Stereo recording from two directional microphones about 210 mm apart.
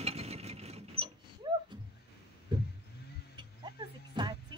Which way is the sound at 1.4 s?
20° right (ahead or behind).